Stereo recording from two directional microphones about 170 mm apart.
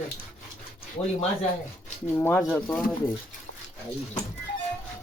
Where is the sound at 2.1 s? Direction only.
10° left (ahead or behind).